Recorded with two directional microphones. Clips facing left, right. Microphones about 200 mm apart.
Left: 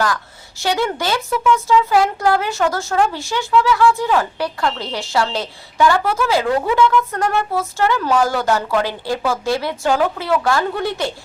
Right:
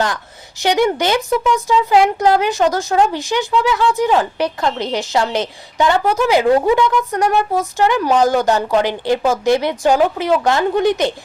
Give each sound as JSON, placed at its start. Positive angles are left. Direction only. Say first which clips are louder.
{"t": 0.6, "sound": "speech", "louder": "right 5 dB", "side_deg": -20}